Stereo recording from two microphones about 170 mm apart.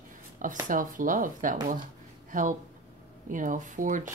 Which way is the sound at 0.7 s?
50° right (ahead or behind).